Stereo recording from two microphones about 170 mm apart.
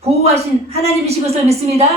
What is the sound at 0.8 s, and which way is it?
A woman's voice, 40° right (ahead or behind).